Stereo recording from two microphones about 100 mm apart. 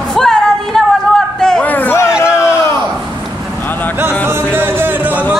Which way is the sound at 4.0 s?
20° right (ahead or behind).